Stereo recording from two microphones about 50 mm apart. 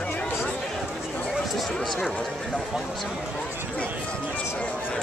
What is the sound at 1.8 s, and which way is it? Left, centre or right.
Speech, centre.